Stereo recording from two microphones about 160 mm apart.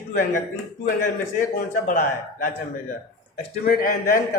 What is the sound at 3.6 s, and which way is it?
Speech, 65° left (ahead or behind).